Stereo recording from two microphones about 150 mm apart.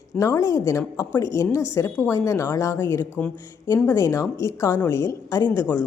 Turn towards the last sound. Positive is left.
turn(degrees=15)  # may be behind; listen again after turning